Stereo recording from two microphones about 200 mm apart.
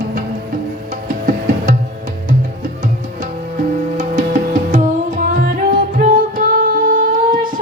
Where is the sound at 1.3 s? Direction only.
40° right (ahead or behind).